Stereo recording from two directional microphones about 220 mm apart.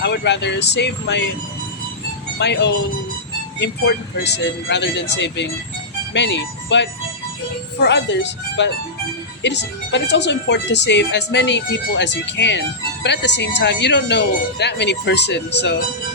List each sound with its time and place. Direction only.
0.0 s a woman's voice: 50° left (ahead or behind)
2.4 s a woman's voice: 50° left (ahead or behind)